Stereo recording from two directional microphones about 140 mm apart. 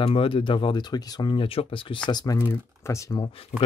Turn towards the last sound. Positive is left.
turn(degrees=40)  # may be behind; listen again after turning